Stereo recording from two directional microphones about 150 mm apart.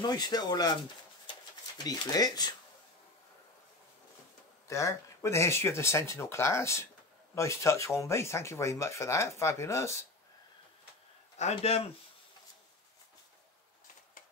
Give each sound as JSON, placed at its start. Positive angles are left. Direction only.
{"t": 0.0, "sound": "speech", "side_deg": 25}
{"t": 1.9, "sound": "speech", "side_deg": 25}
{"t": 4.6, "sound": "speech", "side_deg": 20}
{"t": 11.3, "sound": "speech", "side_deg": 45}